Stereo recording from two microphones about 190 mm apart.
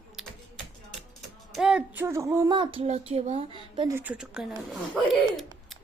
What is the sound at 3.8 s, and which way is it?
A woman's voice, 15° right (ahead or behind).